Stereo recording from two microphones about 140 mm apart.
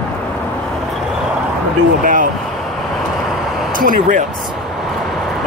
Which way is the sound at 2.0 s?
75° right (ahead or behind).